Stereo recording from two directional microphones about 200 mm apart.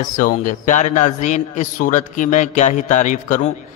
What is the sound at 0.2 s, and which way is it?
A man's voice, 40° left (ahead or behind).